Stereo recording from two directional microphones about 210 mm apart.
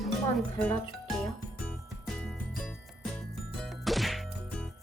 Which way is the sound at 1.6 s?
5° left (ahead or behind).